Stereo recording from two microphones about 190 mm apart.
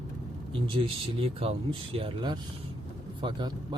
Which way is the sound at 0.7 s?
30° right (ahead or behind).